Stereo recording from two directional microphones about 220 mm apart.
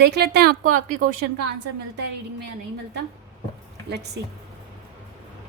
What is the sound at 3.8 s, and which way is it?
Speech, 50° right (ahead or behind).